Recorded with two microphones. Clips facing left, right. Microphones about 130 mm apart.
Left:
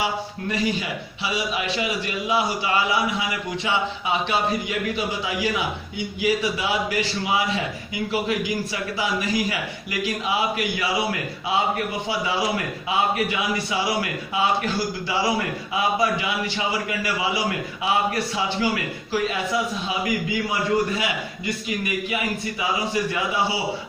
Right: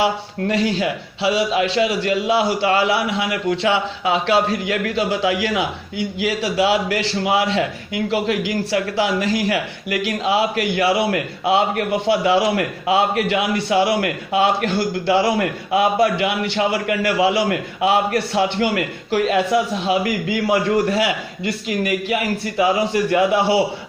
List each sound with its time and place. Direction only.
0.0 s a man's voice: 75° right (ahead or behind)
21.8 s a man's voice: 65° right (ahead or behind)